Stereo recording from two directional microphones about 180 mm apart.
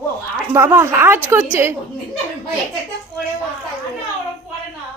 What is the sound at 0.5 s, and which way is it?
Speech, 15° right (ahead or behind).